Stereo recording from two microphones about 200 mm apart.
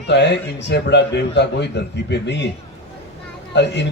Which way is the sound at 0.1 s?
60° left (ahead or behind).